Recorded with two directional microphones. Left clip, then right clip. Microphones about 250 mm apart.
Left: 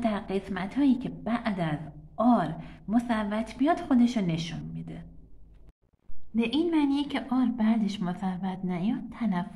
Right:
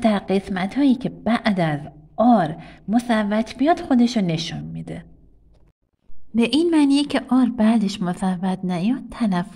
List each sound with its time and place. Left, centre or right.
0.0 s a woman's voice: right
6.3 s speech: right